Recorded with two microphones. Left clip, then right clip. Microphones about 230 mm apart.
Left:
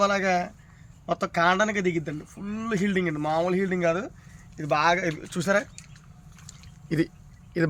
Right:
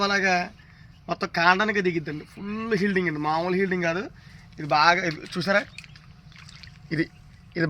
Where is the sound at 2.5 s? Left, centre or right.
Centre.